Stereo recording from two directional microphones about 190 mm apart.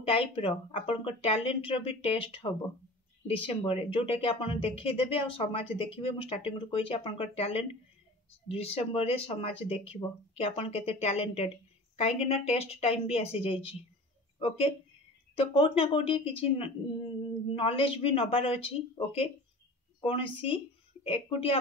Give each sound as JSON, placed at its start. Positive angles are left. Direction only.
{"t": 0.0, "sound": "speech", "side_deg": 30}
{"t": 15.3, "sound": "speech", "side_deg": 30}